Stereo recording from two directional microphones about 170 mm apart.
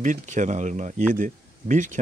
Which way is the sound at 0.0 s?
45° right (ahead or behind).